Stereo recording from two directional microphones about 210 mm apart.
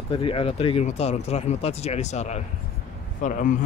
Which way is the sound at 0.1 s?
25° left (ahead or behind).